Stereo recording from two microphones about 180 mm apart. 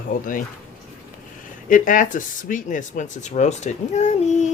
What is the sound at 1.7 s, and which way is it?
Speech, 45° left (ahead or behind).